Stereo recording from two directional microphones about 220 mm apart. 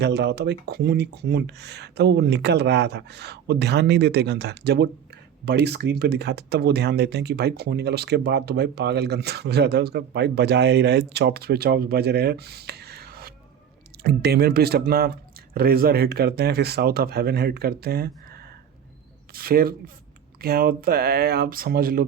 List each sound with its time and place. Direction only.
0.0 s speech: 50° right (ahead or behind)